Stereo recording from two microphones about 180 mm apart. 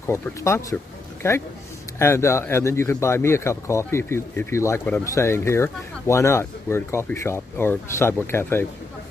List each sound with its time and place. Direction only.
0.0 s speech: 15° left (ahead or behind)